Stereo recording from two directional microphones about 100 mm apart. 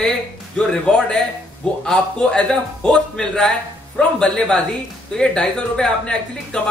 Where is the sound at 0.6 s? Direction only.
10° left (ahead or behind).